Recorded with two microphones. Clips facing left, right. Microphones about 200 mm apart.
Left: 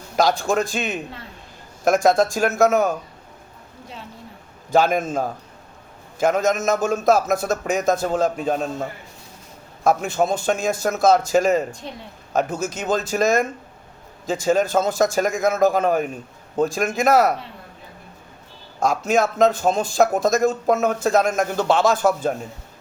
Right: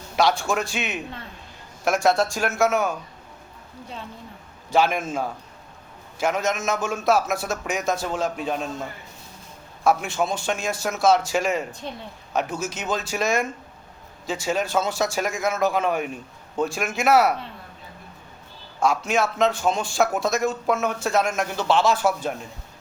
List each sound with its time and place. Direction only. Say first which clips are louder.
0.2 s speech: left 3 dB; 40° left (ahead or behind)
2.0 s speech: left 2 dB; 45° left (ahead or behind)
4.7 s speech: left 3 dB; 40° left (ahead or behind)
18.8 s speech: left 3 dB; 40° left (ahead or behind)